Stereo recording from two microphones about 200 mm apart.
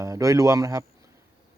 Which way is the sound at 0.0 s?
15° right (ahead or behind).